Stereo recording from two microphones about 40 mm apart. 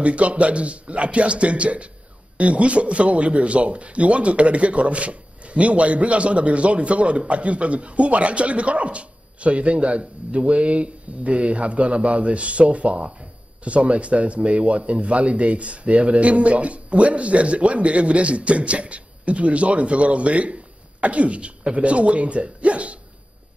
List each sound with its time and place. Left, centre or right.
0.0 s a man's voice: right